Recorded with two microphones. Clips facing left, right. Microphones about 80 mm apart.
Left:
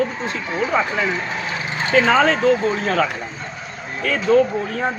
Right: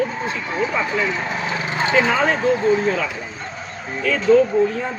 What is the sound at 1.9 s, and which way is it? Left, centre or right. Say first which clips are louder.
A man's voice: left 3 dB; left.